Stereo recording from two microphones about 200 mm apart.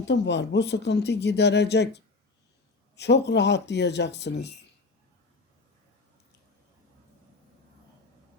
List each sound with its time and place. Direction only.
0.0 s speech: 60° left (ahead or behind)